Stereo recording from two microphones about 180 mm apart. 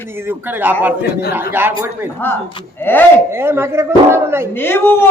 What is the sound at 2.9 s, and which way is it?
Speech, 10° left (ahead or behind).